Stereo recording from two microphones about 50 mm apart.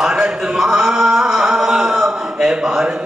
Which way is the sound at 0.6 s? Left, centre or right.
Centre.